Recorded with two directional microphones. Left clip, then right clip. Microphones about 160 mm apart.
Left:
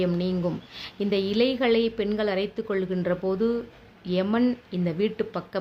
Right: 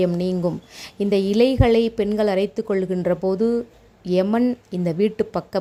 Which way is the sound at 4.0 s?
50° right (ahead or behind).